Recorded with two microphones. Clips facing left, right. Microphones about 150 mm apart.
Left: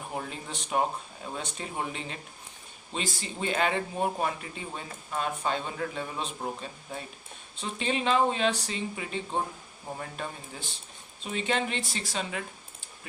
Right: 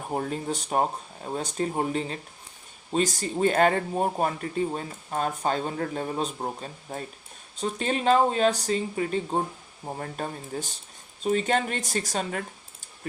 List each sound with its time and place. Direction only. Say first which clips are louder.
0.1 s speech: right 9 dB; 45° right (ahead or behind)